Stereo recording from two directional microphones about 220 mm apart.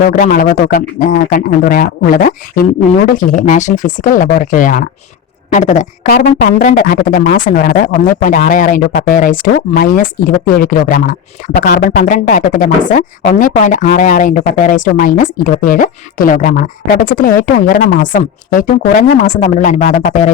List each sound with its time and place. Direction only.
0.0 s speech: 40° left (ahead or behind)